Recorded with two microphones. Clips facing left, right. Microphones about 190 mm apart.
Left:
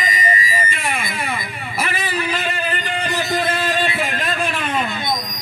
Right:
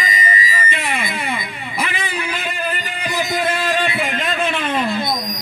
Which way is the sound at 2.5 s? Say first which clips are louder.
Left 1 dB; 10° right (ahead or behind).